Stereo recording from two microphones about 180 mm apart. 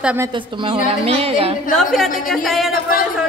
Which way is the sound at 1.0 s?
30° right (ahead or behind).